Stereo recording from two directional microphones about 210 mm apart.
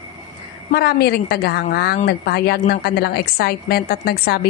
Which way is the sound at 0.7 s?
45° left (ahead or behind).